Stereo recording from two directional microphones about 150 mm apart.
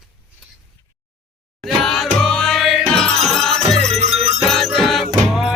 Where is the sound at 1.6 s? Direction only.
Centre (ahead or behind).